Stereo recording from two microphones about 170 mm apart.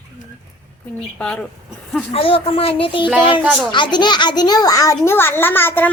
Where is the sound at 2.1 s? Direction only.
35° left (ahead or behind).